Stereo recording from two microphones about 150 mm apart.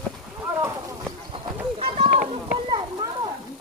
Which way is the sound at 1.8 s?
40° right (ahead or behind).